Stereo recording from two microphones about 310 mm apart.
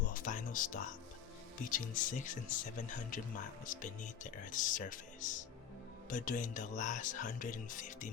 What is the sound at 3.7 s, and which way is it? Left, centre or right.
Speech, left.